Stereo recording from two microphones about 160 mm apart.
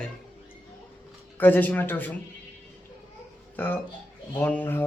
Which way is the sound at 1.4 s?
10° left (ahead or behind).